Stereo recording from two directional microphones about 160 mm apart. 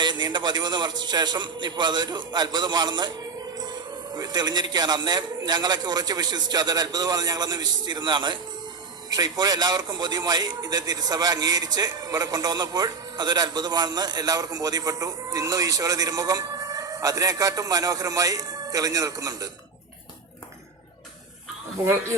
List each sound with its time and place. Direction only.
0.0 s a man's voice: 30° right (ahead or behind)